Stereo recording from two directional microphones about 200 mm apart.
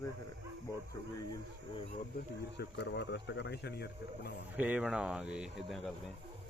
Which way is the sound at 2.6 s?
60° left (ahead or behind).